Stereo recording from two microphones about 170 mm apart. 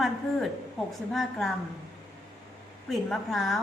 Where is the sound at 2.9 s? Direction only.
Centre (ahead or behind).